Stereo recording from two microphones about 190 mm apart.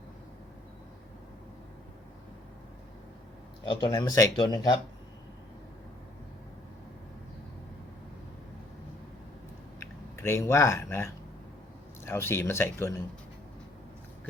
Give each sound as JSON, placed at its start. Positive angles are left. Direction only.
{"t": 3.7, "sound": "speech", "side_deg": 20}
{"t": 9.8, "sound": "speech", "side_deg": 15}